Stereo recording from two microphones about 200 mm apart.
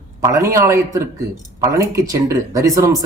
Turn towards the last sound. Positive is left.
turn(degrees=-15)  # may be behind; listen again after turning